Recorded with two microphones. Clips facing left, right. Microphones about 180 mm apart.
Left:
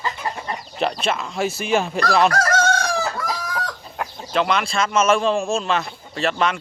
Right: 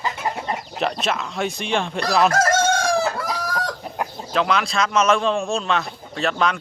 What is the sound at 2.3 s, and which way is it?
Chicken, 25° right (ahead or behind).